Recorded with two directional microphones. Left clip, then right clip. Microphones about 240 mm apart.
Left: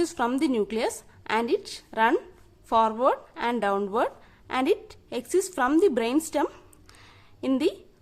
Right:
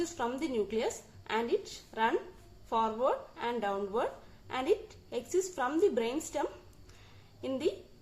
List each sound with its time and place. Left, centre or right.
0.0 s speech: left